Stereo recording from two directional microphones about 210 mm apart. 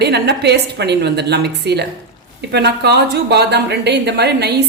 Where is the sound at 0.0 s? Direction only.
50° right (ahead or behind).